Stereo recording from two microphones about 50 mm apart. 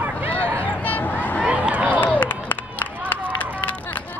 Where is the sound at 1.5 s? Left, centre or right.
Right.